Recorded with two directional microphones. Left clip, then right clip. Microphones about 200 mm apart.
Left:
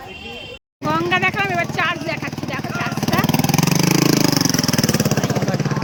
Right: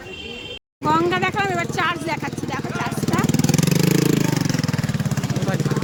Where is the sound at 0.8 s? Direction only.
Centre (ahead or behind).